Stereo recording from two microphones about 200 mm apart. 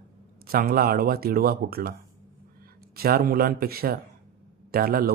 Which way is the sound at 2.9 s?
50° right (ahead or behind).